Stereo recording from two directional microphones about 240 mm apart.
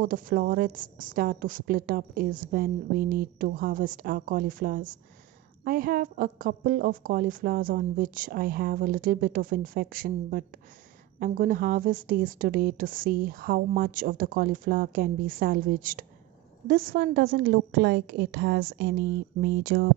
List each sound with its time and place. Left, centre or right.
0.0 s a woman's voice: right